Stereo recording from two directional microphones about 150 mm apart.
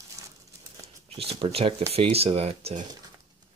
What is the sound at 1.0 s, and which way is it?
Speech, 40° right (ahead or behind).